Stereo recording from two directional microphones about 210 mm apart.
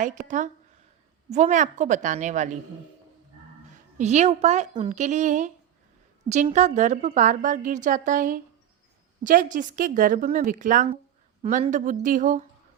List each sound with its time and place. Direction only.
0.0 s a woman's voice: 35° right (ahead or behind)
3.9 s a woman's voice: 35° right (ahead or behind)